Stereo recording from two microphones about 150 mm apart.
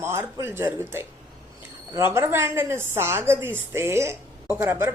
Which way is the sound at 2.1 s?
15° right (ahead or behind).